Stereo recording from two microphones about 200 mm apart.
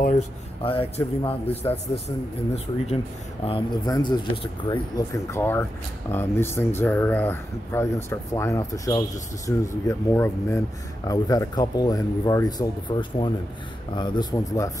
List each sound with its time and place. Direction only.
0.7 s speech: 25° left (ahead or behind)